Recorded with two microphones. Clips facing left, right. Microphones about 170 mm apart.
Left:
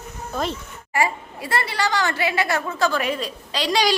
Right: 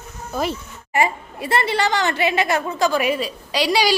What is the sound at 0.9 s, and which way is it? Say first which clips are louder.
A woman's voice: right 2 dB; 20° right (ahead or behind).